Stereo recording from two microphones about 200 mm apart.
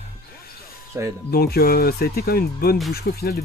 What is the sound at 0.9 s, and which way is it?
Speech, 10° right (ahead or behind).